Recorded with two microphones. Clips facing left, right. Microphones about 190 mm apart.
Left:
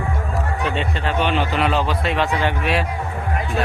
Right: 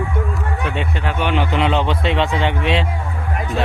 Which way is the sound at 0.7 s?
15° right (ahead or behind).